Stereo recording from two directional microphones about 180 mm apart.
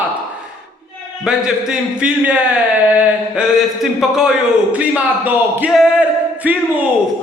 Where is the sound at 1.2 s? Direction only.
5° right (ahead or behind).